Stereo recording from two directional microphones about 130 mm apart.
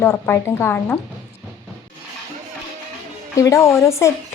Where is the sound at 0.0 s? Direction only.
15° left (ahead or behind).